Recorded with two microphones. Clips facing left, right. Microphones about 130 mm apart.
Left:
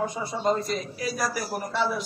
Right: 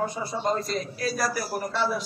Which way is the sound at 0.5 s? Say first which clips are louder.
Left 1 dB; 15° left (ahead or behind).